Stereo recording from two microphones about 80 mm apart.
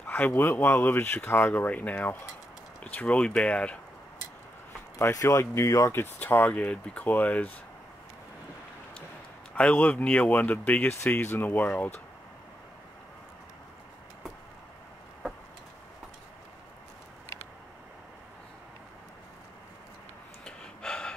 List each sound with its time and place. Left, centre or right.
0.0 s a sound: centre
0.4 s speech: left; by 3.8 s centre
4.9 s speech: left
6.1 s speech: left
9.6 s speech: centre
20.4 s gasp: centre